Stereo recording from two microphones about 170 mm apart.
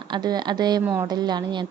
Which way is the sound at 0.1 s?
25° right (ahead or behind).